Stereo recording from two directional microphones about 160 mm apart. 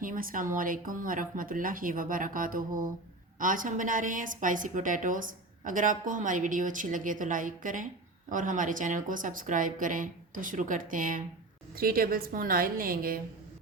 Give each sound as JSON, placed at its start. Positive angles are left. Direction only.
{"t": 0.0, "sound": "a woman's voice", "side_deg": -60}